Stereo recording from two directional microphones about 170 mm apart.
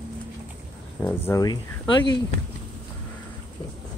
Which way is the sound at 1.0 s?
10° left (ahead or behind).